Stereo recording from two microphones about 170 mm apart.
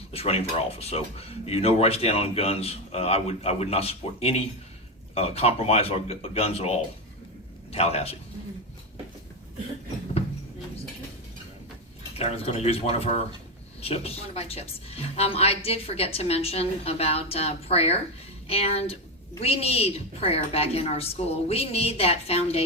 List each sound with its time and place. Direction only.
0.1 s speech: 35° left (ahead or behind)
12.1 s speech: 35° left (ahead or behind)